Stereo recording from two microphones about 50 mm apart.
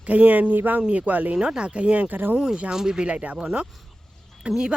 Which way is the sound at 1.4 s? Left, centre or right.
Centre.